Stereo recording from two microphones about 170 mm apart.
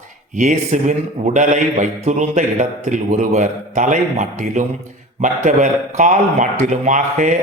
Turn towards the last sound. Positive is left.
turn(degrees=-45)  # may be behind; listen again after turning